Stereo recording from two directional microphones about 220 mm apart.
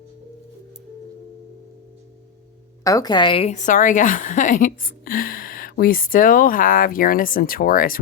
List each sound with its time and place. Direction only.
2.8 s a woman's voice: 15° left (ahead or behind); by 7.9 s 40° left (ahead or behind)